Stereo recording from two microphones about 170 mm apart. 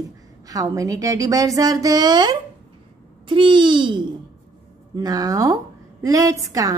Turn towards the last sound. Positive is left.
turn(degrees=-20)  # may be behind; listen again after turning